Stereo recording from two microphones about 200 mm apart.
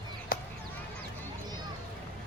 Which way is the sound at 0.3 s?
50° left (ahead or behind).